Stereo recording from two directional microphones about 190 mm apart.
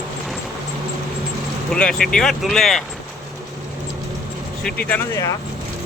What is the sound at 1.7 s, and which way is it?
Speech, 5° left (ahead or behind).